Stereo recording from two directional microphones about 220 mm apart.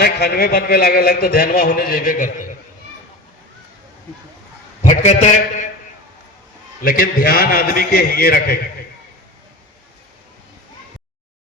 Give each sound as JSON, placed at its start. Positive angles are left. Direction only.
{"t": 0.0, "sound": "a man's voice", "side_deg": 45}
{"t": 4.8, "sound": "a man's voice", "side_deg": 30}
{"t": 6.8, "sound": "a man's voice", "side_deg": 40}